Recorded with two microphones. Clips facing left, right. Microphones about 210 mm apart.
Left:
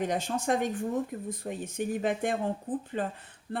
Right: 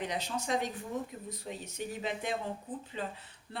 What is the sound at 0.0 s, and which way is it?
Speech, 50° left (ahead or behind).